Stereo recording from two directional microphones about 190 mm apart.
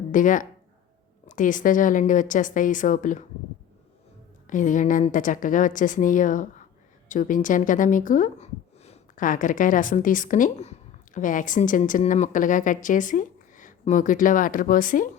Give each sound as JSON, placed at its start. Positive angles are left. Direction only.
{"t": 0.1, "sound": "a woman's voice", "side_deg": 45}
{"t": 4.4, "sound": "a woman's voice", "side_deg": 40}